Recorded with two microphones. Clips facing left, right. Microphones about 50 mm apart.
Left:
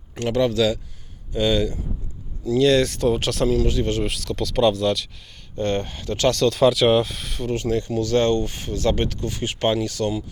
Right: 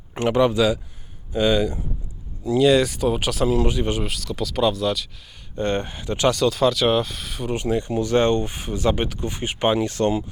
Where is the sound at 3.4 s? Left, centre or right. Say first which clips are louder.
Even; centre.